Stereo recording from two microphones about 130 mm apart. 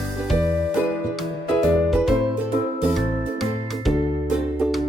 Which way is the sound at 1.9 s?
Centre (ahead or behind).